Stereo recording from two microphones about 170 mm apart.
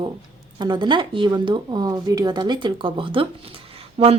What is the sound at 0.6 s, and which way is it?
Speech, 25° right (ahead or behind).